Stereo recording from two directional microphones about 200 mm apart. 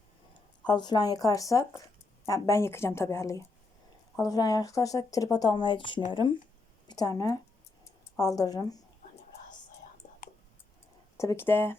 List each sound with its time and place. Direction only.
0.7 s a woman's voice: 20° left (ahead or behind)
9.0 s whispering: 40° left (ahead or behind)
11.2 s a woman's voice: 15° left (ahead or behind)